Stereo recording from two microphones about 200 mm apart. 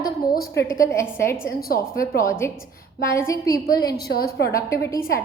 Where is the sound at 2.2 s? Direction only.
15° left (ahead or behind).